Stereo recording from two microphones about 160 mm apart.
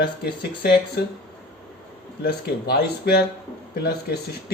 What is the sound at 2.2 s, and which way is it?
Speech, 80° left.